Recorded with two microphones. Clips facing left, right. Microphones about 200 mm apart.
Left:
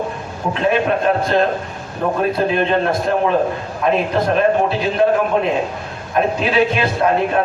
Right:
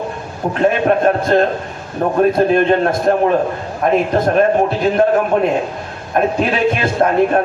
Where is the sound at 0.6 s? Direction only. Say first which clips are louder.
Right 4 dB; 50° right (ahead or behind).